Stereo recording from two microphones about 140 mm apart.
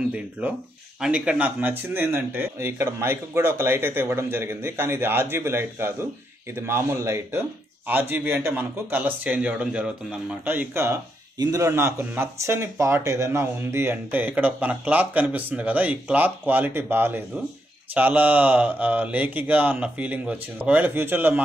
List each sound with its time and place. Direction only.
0.1 s speech: 10° right (ahead or behind)